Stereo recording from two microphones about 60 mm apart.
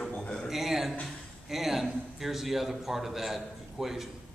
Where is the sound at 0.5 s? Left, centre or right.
Centre.